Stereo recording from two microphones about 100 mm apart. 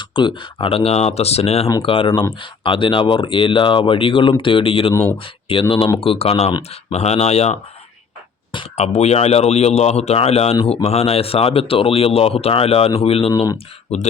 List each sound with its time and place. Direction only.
0.0 s speech: 50° left (ahead or behind); by 1.7 s 90° left
1.8 s speech: 60° left (ahead or behind)
6.0 s speech: 75° left (ahead or behind); by 7.6 s 90° left
8.7 s speech: 90° left
13.9 s speech: 90° left